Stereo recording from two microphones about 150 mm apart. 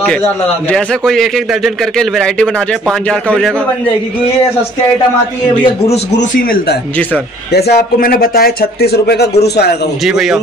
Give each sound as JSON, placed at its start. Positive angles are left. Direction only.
{"t": 0.2, "sound": "a man's voice", "side_deg": 5}
{"t": 7.5, "sound": "speech", "side_deg": 90}
{"t": 10.0, "sound": "a man's voice", "side_deg": -5}